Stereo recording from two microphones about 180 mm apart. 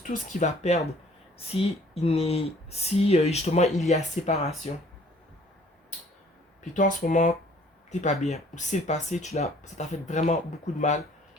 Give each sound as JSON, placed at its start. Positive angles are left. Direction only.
{"t": 0.0, "sound": "speech", "side_deg": 45}
{"t": 6.6, "sound": "speech", "side_deg": 45}